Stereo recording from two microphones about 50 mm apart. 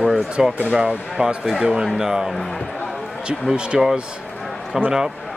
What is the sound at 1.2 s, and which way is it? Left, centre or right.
Speech, centre.